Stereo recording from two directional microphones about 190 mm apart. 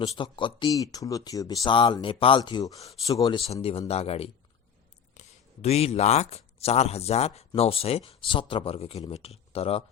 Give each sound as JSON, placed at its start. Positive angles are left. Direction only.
{"t": 0.2, "sound": "speech", "side_deg": 25}
{"t": 3.1, "sound": "speech", "side_deg": 20}
{"t": 5.2, "sound": "a sound", "side_deg": 40}
{"t": 5.6, "sound": "speech", "side_deg": 35}